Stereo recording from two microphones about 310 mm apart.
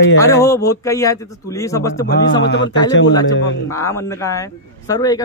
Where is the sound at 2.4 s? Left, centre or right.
Left.